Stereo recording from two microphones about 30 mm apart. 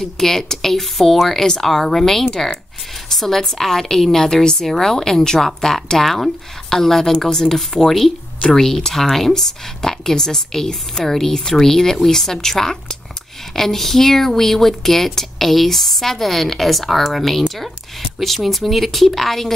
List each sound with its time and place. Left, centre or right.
0.2 s speech: centre
6.0 s a woman's voice: centre